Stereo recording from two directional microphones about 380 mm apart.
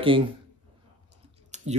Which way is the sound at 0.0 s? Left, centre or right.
Centre.